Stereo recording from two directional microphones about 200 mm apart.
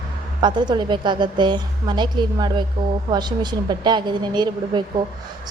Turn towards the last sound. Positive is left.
turn(degrees=-20)  # may be behind; listen again after turning